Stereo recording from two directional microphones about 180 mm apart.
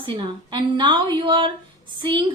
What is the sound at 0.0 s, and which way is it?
A woman's voice, 30° right (ahead or behind).